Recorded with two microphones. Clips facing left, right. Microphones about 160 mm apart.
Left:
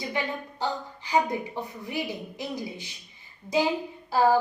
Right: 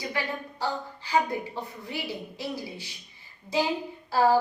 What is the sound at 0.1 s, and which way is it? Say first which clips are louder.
A woman's voice: left 1 dB; 20° left (ahead or behind).